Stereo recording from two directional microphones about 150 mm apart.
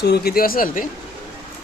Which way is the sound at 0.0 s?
90° left.